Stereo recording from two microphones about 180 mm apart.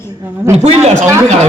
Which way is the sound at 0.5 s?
35° right (ahead or behind).